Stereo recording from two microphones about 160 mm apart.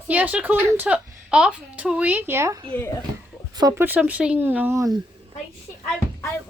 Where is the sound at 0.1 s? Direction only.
10° right (ahead or behind).